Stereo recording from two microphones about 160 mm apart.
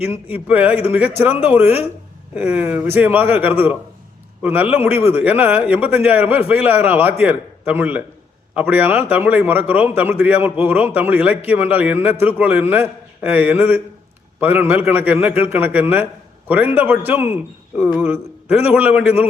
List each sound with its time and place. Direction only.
0.0 s a man's voice: 10° right (ahead or behind)